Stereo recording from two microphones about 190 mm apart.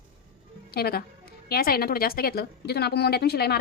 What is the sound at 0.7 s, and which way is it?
A woman's voice, 55° left (ahead or behind).